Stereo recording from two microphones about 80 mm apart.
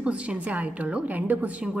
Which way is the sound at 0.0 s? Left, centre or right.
Centre.